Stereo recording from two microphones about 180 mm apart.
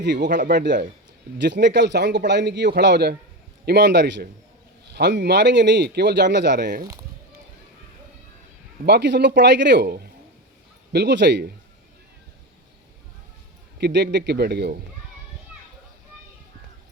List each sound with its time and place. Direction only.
0.0 s a man's voice: 75° right (ahead or behind)
0.3 s speech: 45° right (ahead or behind)
0.5 s a man's voice: 75° right (ahead or behind)
8.9 s a man's voice: 70° right (ahead or behind)
10.9 s a man's voice: 75° right (ahead or behind)
13.7 s a man's voice: 70° right (ahead or behind)